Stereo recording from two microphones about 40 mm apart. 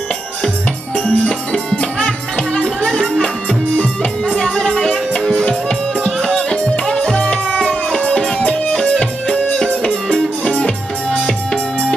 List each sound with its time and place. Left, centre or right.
0.9 s music: left
1.5 s music: left
4.6 s music: centre
10.6 s music: left